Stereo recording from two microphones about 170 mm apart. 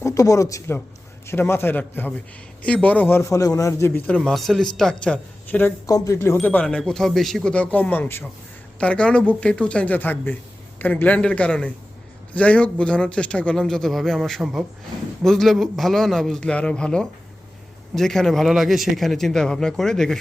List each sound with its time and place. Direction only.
0.0 s a man's voice: 20° left (ahead or behind); by 20.1 s 5° left (ahead or behind)